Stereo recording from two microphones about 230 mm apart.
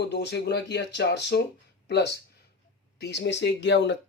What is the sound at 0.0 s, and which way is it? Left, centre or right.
Speech, left.